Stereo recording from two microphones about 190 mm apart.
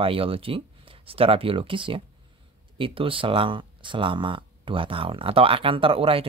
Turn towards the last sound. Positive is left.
turn(degrees=-30)  # may be behind; listen again after turning